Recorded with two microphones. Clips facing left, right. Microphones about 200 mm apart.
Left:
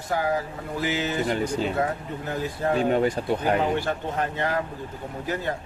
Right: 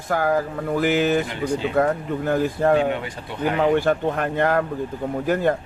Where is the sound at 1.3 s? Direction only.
45° left (ahead or behind).